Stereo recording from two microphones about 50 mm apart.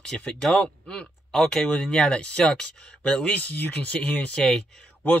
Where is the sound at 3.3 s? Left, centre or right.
Left.